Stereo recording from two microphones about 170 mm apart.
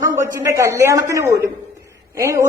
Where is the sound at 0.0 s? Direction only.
20° right (ahead or behind).